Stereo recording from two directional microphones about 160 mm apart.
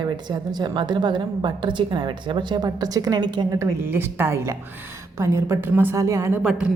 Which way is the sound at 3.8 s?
15° right (ahead or behind).